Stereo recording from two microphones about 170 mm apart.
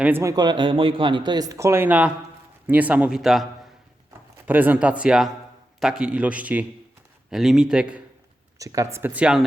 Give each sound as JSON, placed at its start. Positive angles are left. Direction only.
{"t": 0.0, "sound": "speech", "side_deg": -15}
{"t": 4.4, "sound": "speech", "side_deg": -10}
{"t": 8.5, "sound": "speech", "side_deg": -20}